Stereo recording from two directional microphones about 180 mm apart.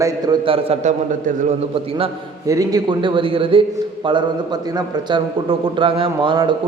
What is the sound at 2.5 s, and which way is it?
A man's voice, 20° right (ahead or behind).